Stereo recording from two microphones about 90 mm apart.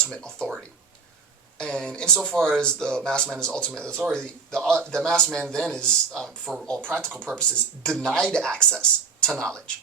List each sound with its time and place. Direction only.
0.0 s speech: 10° left (ahead or behind)
1.5 s speech: 10° left (ahead or behind)